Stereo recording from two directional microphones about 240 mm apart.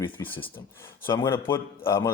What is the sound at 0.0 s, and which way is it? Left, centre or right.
Speech, centre.